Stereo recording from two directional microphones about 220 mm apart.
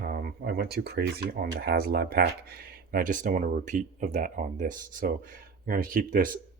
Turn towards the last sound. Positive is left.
turn(degrees=-40)  # may be behind; listen again after turning